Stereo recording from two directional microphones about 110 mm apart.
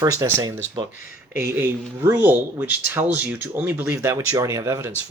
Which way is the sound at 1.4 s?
20° right (ahead or behind).